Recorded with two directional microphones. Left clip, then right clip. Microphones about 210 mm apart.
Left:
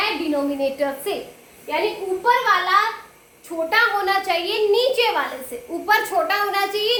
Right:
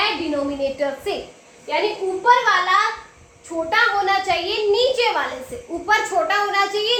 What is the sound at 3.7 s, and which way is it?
A child's voice, 20° left (ahead or behind).